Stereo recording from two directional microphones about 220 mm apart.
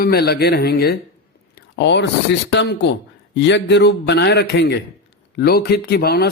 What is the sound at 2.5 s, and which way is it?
A man's voice, 50° left (ahead or behind).